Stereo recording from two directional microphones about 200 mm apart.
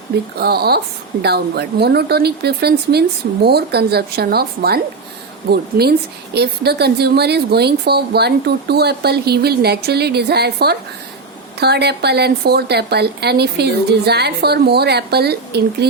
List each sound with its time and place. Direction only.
0.3 s a woman's voice: 50° right (ahead or behind)